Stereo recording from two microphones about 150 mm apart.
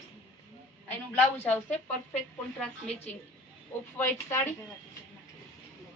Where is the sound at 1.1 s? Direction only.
15° left (ahead or behind).